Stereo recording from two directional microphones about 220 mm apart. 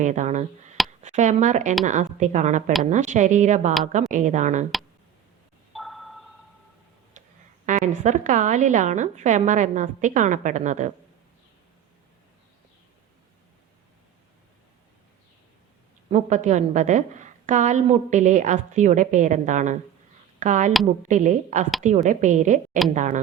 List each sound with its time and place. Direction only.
0.0 s a woman's voice: 35° right (ahead or behind)
5.7 s a sound: centre (ahead or behind)
7.6 s a woman's voice: 35° right (ahead or behind)
16.0 s a woman's voice: 35° right (ahead or behind)